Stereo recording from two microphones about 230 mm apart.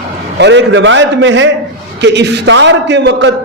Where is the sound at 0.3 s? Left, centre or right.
Right.